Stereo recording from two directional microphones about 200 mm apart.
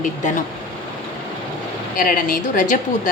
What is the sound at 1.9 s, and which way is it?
Speech, 45° left (ahead or behind).